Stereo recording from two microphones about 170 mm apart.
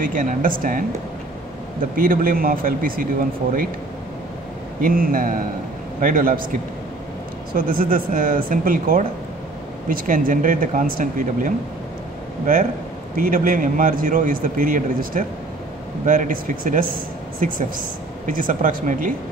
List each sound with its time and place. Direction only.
0.0 s a man's voice: 50° right (ahead or behind)
2.0 s a man's voice: 55° right (ahead or behind)
4.8 s a man's voice: 55° right (ahead or behind)
7.5 s a man's voice: 55° right (ahead or behind)
13.1 s a man's voice: 55° right (ahead or behind)